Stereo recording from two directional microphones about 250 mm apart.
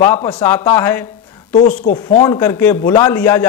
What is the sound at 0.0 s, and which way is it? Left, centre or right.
A man's voice, centre.